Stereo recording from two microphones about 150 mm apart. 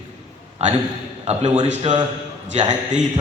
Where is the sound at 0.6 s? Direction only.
45° right (ahead or behind).